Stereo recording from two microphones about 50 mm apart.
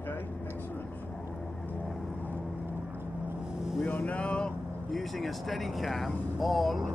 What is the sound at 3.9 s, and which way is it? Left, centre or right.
Vehicle, left.